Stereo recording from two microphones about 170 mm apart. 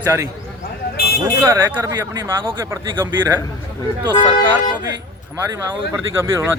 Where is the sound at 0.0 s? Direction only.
15° right (ahead or behind).